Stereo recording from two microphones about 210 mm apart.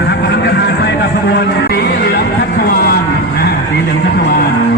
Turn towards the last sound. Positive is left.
turn(degrees=50)  # may be behind; listen again after turning